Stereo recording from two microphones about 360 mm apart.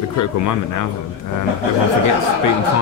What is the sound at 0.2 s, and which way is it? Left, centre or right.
Speech, left.